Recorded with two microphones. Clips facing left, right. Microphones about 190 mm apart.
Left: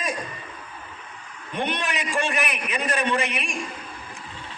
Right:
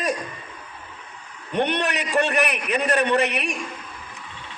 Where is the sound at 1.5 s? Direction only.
65° right (ahead or behind).